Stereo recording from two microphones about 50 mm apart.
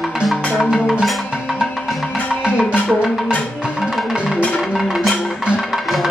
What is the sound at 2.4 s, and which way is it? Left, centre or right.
Music, centre.